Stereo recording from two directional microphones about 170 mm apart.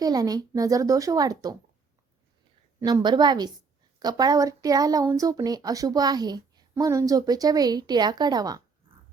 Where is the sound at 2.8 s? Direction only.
25° right (ahead or behind).